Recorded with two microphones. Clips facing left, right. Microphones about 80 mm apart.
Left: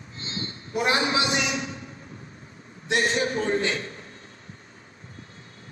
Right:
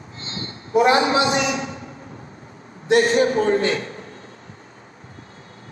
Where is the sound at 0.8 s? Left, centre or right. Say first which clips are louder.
Right 8 dB; right.